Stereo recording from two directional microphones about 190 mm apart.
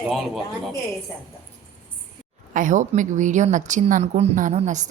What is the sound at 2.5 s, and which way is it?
A woman's voice, 45° right (ahead or behind).